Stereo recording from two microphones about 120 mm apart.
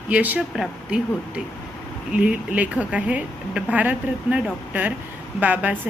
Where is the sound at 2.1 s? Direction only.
10° right (ahead or behind).